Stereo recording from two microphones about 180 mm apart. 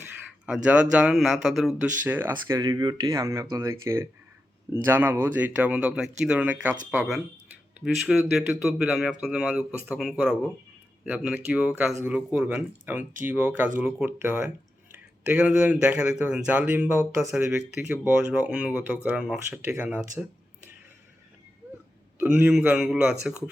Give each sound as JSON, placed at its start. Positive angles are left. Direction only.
{"t": 0.4, "sound": "speech", "side_deg": -5}
{"t": 22.2, "sound": "speech", "side_deg": -5}